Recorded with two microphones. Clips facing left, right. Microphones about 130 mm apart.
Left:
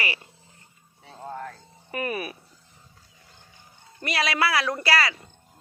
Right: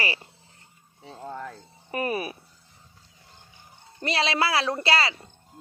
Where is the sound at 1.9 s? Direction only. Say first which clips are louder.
Right 2 dB; 30° right (ahead or behind).